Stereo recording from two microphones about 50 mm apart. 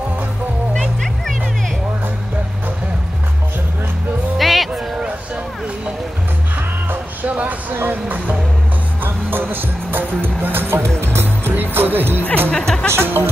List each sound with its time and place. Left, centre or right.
0.7 s music: centre
4.4 s music: centre
4.9 s a sound: centre
6.9 s music: right
7.9 s speech: right
9.0 s music: right
12.4 s music: centre
12.9 s music: right